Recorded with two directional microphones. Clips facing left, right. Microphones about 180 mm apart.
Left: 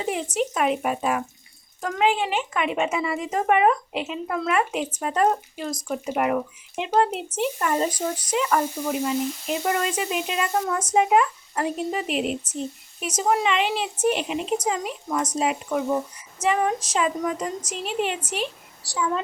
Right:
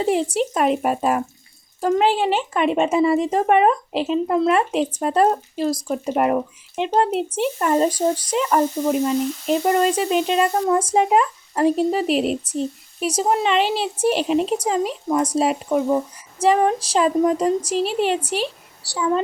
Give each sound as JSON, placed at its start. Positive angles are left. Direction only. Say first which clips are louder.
{"t": 0.0, "sound": "speech", "louder": "right 6 dB", "side_deg": -35}